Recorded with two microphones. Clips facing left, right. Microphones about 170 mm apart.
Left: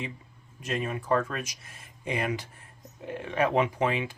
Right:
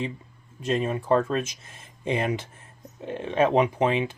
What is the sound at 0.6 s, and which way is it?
Speech, 30° right (ahead or behind).